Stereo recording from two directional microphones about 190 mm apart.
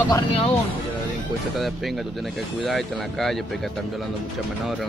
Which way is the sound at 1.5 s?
Centre (ahead or behind).